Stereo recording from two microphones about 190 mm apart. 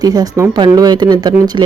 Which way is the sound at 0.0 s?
20° right (ahead or behind).